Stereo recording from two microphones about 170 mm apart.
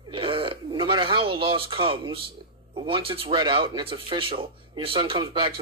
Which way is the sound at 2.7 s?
30° right (ahead or behind).